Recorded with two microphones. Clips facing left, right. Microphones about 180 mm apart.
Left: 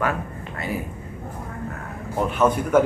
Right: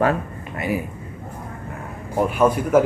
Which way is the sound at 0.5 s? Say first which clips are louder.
Right 5 dB; 15° right (ahead or behind).